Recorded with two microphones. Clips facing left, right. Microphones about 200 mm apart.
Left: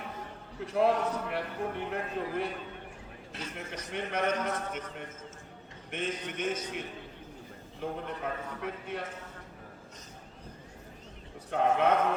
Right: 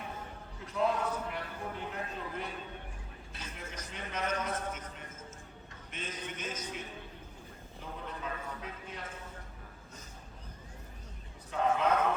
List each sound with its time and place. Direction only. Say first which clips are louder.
0.6 s a man's voice: left 5 dB; 65° left (ahead or behind)
3.5 s a man's voice: left 7 dB; 60° left (ahead or behind)
11.5 s a man's voice: left 3 dB; 65° left (ahead or behind)